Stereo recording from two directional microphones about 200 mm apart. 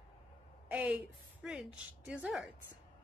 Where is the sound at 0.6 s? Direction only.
5° right (ahead or behind).